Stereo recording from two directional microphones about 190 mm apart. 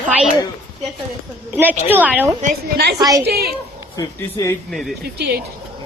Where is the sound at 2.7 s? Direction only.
60° right (ahead or behind).